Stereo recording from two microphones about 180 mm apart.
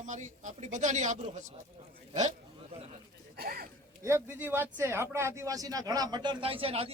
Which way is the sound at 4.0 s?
15° right (ahead or behind).